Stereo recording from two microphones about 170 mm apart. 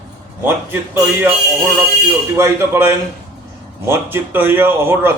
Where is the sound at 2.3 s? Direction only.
15° right (ahead or behind).